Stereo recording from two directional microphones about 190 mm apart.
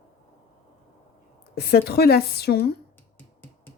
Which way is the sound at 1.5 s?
55° left (ahead or behind).